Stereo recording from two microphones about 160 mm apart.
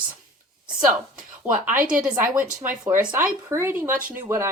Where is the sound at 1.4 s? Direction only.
10° right (ahead or behind).